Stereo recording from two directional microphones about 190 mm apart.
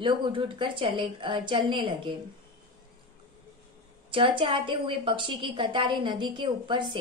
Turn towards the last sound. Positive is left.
turn(degrees=-25)  # may be behind; listen again after turning